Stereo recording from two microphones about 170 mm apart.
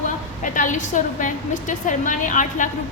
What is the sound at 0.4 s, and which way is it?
A woman's voice, 50° left (ahead or behind).